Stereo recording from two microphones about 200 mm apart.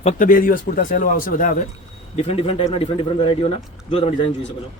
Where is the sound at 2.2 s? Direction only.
30° left (ahead or behind).